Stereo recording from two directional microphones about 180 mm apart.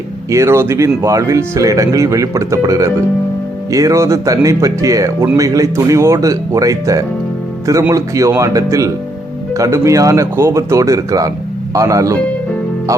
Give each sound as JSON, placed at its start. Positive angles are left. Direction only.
{"t": 0.3, "sound": "speech", "side_deg": -15}